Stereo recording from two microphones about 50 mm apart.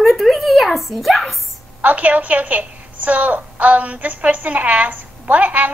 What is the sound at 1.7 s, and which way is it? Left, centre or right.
A woman's voice, right.